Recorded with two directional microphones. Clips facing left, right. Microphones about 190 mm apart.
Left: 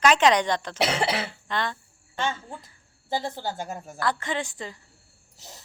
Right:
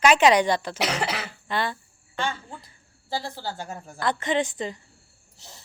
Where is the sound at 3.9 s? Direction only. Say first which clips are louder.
Right 4 dB; 20° right (ahead or behind).